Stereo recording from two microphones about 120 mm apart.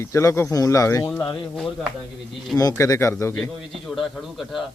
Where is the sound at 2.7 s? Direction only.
25° left (ahead or behind).